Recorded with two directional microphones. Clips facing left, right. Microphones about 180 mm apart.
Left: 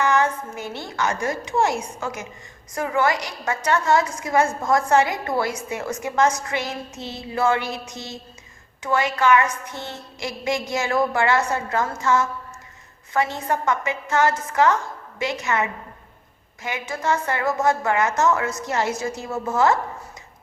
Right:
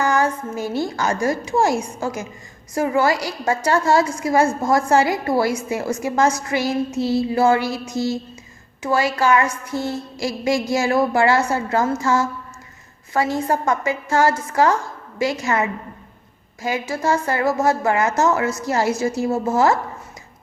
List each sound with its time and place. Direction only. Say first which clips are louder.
0.0 s a sound: right 1 dB; 35° right (ahead or behind)
0.9 s a woman's voice: left 1 dB; 35° right (ahead or behind)
7.9 s speech: right 13 dB; 90° right
8.8 s a woman's voice: right 2 dB; 30° right (ahead or behind)
16.9 s a woman's voice: right 2 dB; 30° right (ahead or behind)